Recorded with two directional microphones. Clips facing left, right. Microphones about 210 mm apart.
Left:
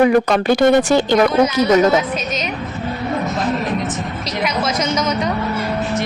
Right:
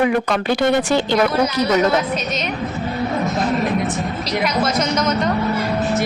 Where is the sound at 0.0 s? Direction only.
40° left (ahead or behind).